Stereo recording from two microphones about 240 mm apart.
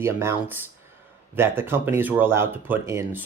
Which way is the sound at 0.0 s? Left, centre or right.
Centre.